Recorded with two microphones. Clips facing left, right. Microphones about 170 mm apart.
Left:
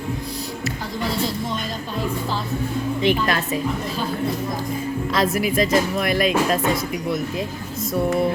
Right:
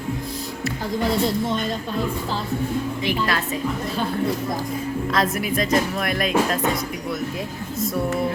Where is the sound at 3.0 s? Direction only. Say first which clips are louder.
Left 7 dB; 25° left (ahead or behind).